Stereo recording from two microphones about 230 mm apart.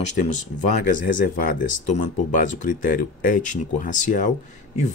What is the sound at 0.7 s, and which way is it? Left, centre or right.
Speech, left.